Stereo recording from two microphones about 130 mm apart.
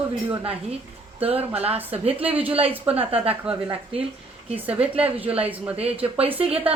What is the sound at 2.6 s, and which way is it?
Speech, 50° right (ahead or behind).